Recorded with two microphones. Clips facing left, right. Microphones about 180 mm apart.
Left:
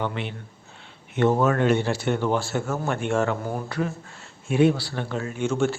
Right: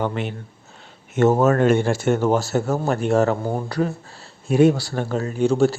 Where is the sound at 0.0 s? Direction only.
45° right (ahead or behind).